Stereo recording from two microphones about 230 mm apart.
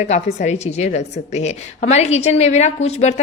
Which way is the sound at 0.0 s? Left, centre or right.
Left.